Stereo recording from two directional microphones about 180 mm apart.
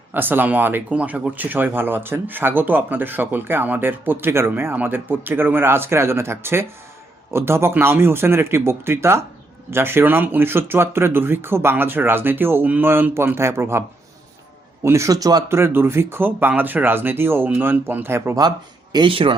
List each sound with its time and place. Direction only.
0.1 s speech: 10° right (ahead or behind)
14.8 s speech: 15° right (ahead or behind)
18.9 s speech: 30° right (ahead or behind)